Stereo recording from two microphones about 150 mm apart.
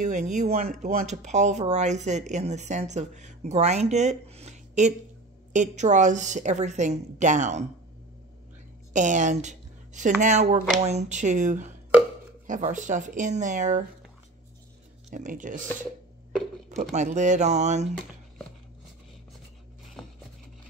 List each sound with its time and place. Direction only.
0.0 s speech: 55° right (ahead or behind)
8.9 s speech: 55° right (ahead or behind)
15.0 s speech: 55° right (ahead or behind)
16.6 s speech: 50° right (ahead or behind)